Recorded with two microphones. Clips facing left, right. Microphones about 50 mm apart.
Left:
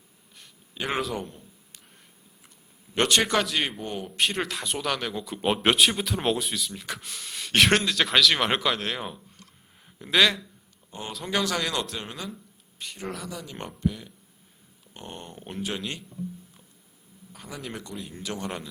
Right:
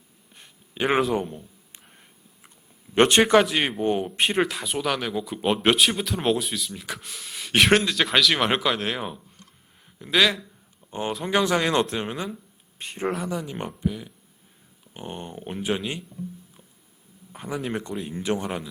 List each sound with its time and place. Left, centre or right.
0.3 s a sound: right
2.9 s speech: right
4.4 s speech: centre
11.1 s speech: centre
12.8 s speech: right
13.4 s speech: centre
15.8 s speech: centre
17.3 s speech: right
18.4 s speech: centre